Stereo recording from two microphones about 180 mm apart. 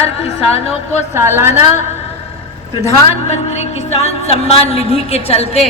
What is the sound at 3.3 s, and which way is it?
A woman's voice, 40° left (ahead or behind).